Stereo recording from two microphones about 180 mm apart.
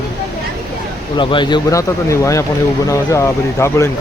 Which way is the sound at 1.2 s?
25° left (ahead or behind).